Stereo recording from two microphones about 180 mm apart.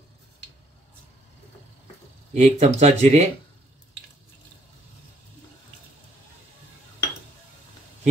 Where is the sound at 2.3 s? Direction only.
35° right (ahead or behind).